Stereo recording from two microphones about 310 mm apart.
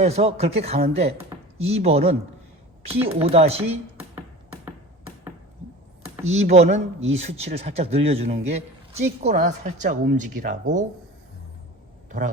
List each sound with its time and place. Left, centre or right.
0.0 s speech: centre
4.6 s finger snapping: centre
6.2 s speech: right